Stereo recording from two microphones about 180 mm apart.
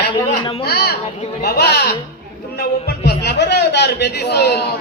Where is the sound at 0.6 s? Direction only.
60° left (ahead or behind).